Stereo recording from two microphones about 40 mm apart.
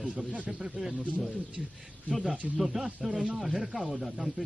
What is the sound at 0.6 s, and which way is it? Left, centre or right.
Speech, centre.